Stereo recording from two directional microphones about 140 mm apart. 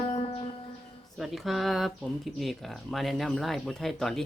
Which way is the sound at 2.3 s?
Centre (ahead or behind).